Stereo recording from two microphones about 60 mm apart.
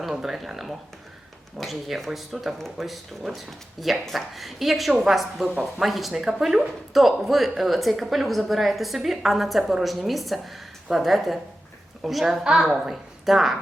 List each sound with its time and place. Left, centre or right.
0.0 s speech: centre
5.5 s speech: centre
5.8 s a woman's voice: centre